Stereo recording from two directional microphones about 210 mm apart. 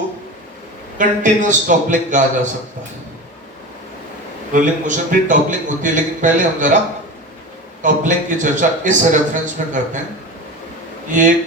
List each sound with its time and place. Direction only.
0.9 s a man's voice: 35° right (ahead or behind)
4.5 s a man's voice: 40° right (ahead or behind)
7.8 s a man's voice: 35° right (ahead or behind)